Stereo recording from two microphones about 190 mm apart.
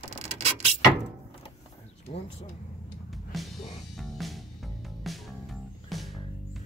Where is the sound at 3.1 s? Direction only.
Centre (ahead or behind).